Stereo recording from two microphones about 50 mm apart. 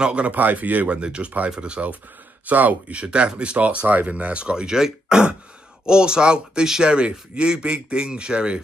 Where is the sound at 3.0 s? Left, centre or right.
Right.